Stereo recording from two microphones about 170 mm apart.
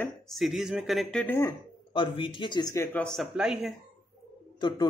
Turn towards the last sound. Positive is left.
turn(degrees=25)  # may be behind; listen again after turning